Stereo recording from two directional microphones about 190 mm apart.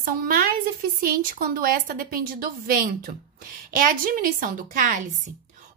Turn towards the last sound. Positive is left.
turn(degrees=-45)  # may be behind; listen again after turning